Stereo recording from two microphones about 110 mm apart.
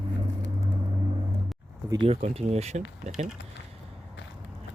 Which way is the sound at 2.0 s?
65° right (ahead or behind).